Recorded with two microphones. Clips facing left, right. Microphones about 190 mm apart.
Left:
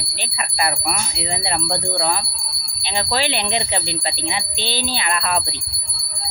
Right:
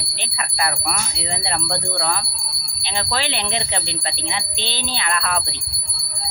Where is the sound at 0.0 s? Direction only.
Centre (ahead or behind).